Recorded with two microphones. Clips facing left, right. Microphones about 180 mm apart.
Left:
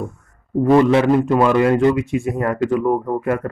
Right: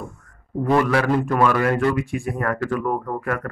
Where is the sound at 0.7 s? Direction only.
20° left (ahead or behind).